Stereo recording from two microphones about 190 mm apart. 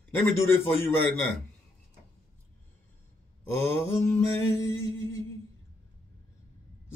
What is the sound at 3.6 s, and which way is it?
Speech, 10° left (ahead or behind).